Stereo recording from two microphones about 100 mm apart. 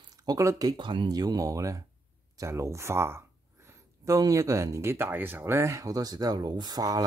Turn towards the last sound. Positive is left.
turn(degrees=-40)  # may be behind; listen again after turning